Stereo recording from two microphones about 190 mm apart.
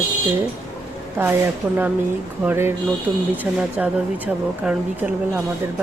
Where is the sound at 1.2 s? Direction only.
10° right (ahead or behind).